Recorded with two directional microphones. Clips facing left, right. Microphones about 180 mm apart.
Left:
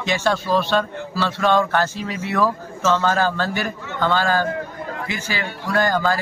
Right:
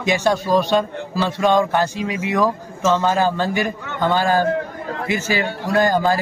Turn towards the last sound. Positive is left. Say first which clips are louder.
# right 3 dB
turn(degrees=-20)  # may be behind; listen again after turning